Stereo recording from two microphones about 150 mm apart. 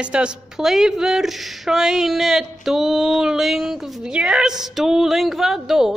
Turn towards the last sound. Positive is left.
turn(degrees=-5)  # may be behind; listen again after turning